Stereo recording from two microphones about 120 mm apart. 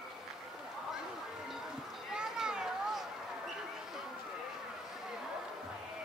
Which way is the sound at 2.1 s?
5° right (ahead or behind).